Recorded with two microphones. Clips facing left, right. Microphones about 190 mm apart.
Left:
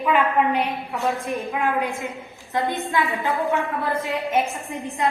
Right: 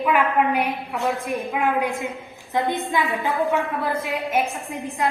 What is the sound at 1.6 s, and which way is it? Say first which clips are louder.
A woman's voice: right 2 dB; 15° right (ahead or behind).